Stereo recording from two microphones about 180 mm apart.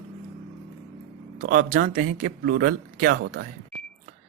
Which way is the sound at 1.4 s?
50° right (ahead or behind).